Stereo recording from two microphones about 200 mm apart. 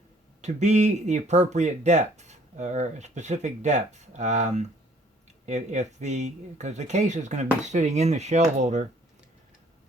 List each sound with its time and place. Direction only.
0.4 s speech: 35° right (ahead or behind)